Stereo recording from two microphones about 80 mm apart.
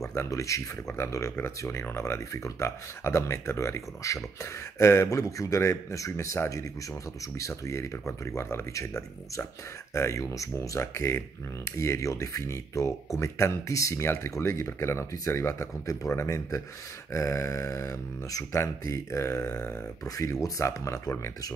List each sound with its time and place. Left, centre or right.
0.1 s speech: left